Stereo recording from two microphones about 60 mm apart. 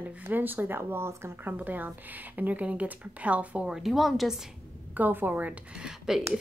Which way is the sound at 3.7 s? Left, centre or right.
Centre.